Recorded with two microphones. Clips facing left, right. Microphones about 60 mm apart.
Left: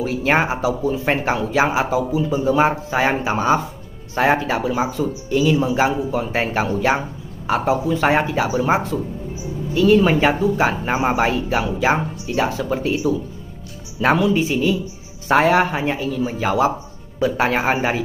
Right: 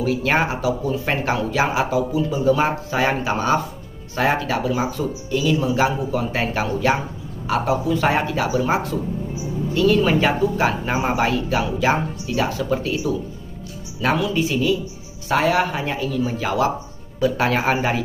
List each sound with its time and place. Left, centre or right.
0.0 s speech: centre
9.8 s speech: centre
15.2 s speech: left
15.8 s speech: centre